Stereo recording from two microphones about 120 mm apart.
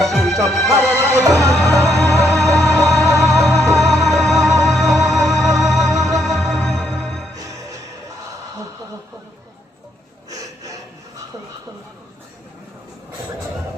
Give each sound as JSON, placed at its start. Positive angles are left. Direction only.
{"t": 0.1, "sound": "music", "side_deg": 0}
{"t": 1.2, "sound": "music", "side_deg": -25}
{"t": 1.9, "sound": "music", "side_deg": 0}